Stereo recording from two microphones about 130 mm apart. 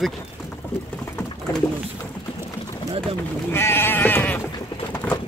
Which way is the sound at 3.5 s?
15° left (ahead or behind).